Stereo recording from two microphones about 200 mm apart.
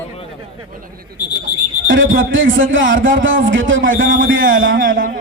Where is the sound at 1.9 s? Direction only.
75° right (ahead or behind).